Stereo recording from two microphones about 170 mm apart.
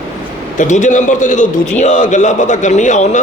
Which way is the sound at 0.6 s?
45° left (ahead or behind).